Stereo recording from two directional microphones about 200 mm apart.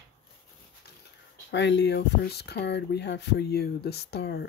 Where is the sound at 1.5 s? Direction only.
60° left (ahead or behind).